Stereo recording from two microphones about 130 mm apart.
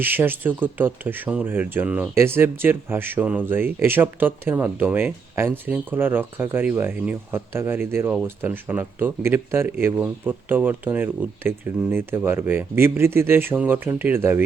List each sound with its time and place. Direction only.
0.0 s speech: 15° right (ahead or behind)